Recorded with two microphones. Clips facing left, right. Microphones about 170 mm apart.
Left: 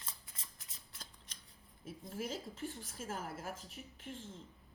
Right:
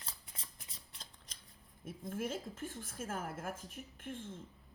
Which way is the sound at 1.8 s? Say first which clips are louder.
Right 3 dB; 50° right (ahead or behind).